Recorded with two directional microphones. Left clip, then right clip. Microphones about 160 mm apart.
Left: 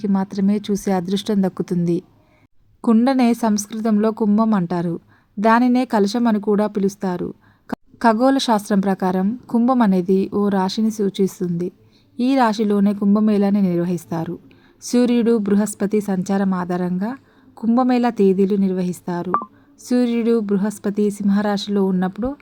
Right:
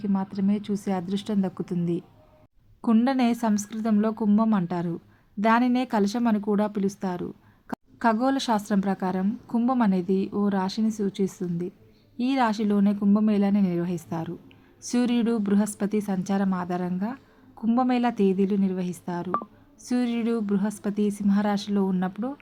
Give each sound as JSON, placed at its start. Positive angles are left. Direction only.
{"t": 0.0, "sound": "a woman's voice", "side_deg": 45}